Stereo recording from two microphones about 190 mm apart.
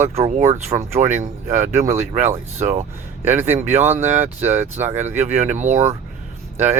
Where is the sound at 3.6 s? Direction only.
35° right (ahead or behind).